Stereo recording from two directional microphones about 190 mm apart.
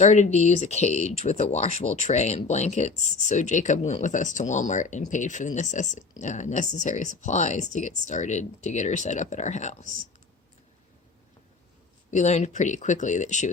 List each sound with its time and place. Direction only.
0.0 s speech: 40° left (ahead or behind)
12.1 s speech: 40° left (ahead or behind)